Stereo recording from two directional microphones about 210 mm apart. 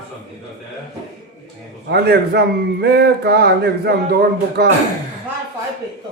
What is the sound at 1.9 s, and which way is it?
Speech, 50° right (ahead or behind).